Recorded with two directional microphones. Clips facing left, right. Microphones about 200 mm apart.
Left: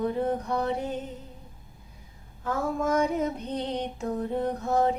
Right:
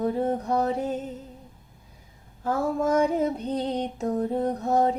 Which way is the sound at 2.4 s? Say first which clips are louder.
Right 3 dB; 30° right (ahead or behind).